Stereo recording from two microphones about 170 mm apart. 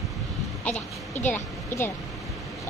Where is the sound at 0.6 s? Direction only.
10° left (ahead or behind).